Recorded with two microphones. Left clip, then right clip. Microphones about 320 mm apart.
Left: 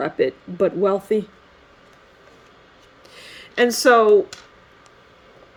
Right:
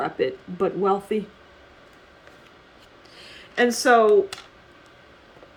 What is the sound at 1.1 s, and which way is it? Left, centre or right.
Speech, left.